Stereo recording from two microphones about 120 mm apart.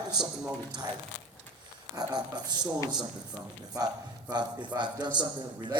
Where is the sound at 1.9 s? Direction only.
35° right (ahead or behind).